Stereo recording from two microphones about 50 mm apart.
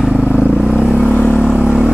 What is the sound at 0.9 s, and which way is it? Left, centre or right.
Vehicle, left.